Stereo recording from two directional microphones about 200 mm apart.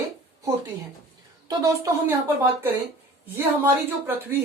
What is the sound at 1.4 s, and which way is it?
Speech, 20° right (ahead or behind).